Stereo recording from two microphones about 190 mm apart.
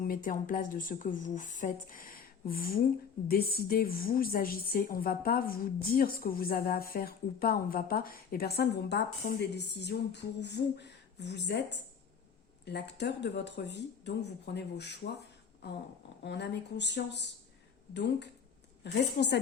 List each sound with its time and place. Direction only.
0.0 s a woman's voice: 45° left (ahead or behind); by 15.1 s 65° left (ahead or behind)
16.2 s speech: 65° left (ahead or behind)
18.8 s speech: 60° left (ahead or behind)